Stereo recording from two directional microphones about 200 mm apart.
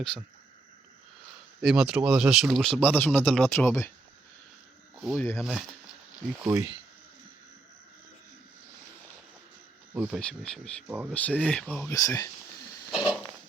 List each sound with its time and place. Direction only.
0.0 s speech: 5° left (ahead or behind)
1.6 s speech: 5° right (ahead or behind)
4.9 s speech: centre (ahead or behind)
6.4 s speech: 15° right (ahead or behind)
9.9 s speech: 5° right (ahead or behind)
10.8 s speech: 10° right (ahead or behind)
11.1 s speech: 5° left (ahead or behind)
12.9 s a sound: centre (ahead or behind)